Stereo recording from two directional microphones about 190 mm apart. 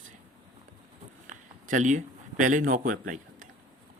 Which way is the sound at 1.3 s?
40° right (ahead or behind).